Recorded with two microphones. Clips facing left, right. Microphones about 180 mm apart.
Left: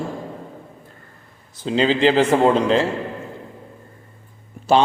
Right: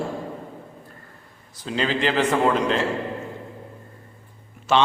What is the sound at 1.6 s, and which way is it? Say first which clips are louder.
A man's voice: left 7 dB; 25° left (ahead or behind).